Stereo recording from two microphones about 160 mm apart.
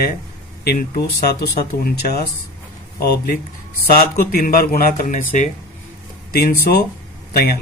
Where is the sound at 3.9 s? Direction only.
65° left (ahead or behind).